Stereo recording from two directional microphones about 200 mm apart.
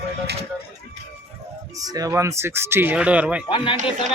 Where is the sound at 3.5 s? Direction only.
25° left (ahead or behind).